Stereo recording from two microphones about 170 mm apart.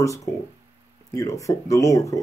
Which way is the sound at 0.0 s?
20° left (ahead or behind).